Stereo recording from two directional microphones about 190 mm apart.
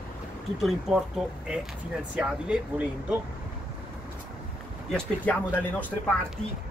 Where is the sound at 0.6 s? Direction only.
Centre (ahead or behind).